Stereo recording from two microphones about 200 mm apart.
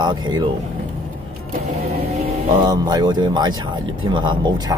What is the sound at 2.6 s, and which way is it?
Speech, 20° right (ahead or behind).